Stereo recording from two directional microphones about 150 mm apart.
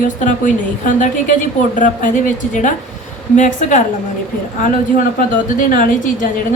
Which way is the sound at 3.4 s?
60° left (ahead or behind).